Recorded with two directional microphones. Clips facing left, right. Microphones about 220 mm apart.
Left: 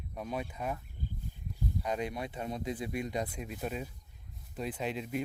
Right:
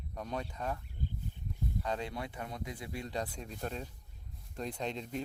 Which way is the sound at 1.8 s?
15° left (ahead or behind).